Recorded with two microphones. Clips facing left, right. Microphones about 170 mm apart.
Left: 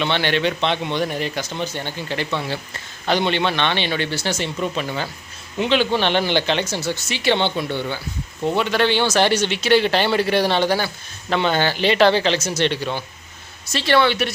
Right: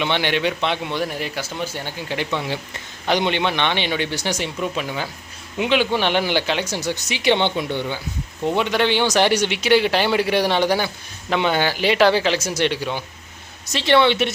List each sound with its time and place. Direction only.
0.0 s speech: 15° right (ahead or behind)